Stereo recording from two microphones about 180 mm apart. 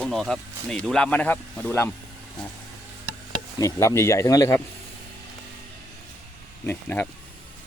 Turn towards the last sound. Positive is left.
turn(degrees=10)  # may be behind; listen again after turning